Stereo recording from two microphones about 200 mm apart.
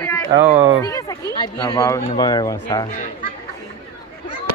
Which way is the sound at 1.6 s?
15° left (ahead or behind).